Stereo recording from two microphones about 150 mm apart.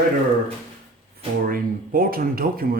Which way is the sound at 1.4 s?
70° right (ahead or behind).